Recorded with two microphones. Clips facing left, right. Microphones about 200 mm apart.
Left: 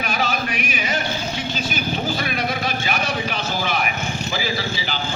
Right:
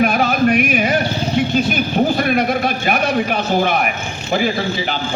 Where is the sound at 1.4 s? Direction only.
55° right (ahead or behind).